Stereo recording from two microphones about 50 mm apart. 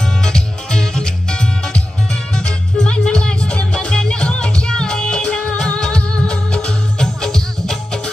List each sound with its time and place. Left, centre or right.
0.2 s music: centre